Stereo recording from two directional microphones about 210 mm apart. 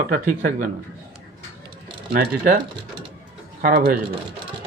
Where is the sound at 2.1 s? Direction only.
45° right (ahead or behind).